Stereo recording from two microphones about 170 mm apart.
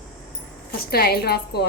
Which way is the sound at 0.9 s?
65° left (ahead or behind).